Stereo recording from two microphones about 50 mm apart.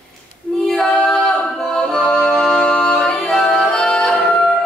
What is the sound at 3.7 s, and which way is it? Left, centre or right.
Music, centre.